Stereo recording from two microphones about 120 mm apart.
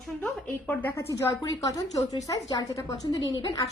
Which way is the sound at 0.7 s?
15° left (ahead or behind).